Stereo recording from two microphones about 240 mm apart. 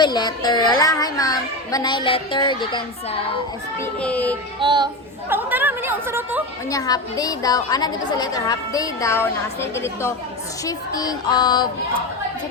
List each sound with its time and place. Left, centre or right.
0.0 s a woman's voice: centre
3.8 s speech: centre
4.6 s speech: centre
5.3 s a woman's voice: centre
6.7 s a woman's voice: centre